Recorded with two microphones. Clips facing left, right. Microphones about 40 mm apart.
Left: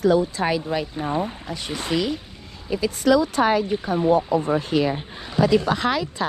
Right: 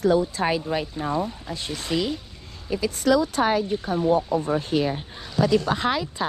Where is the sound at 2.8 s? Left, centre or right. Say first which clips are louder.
Left 2 dB; left.